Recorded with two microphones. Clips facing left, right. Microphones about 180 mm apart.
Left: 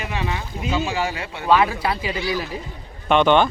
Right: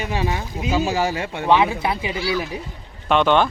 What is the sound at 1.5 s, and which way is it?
Speech, 20° right (ahead or behind).